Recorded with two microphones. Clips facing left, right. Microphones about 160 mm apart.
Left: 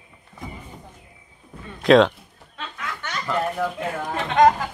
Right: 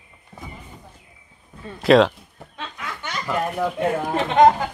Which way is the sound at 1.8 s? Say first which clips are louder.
Even; centre (ahead or behind).